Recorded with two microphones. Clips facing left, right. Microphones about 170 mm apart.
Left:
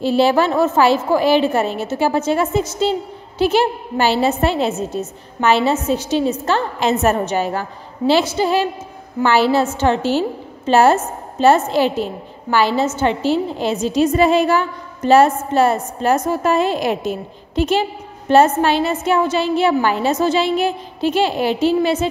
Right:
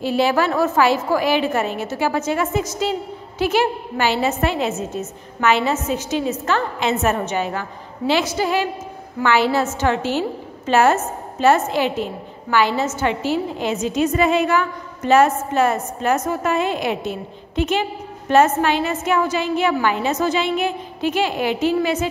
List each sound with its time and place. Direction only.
0.0 s a woman's voice: 30° left (ahead or behind)